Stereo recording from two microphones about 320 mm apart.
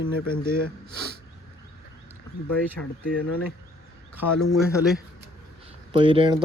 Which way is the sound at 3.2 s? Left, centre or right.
Left.